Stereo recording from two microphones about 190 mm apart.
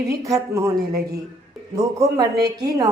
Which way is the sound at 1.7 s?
20° right (ahead or behind).